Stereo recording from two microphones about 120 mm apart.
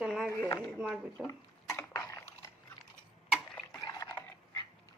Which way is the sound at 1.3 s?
25° left (ahead or behind).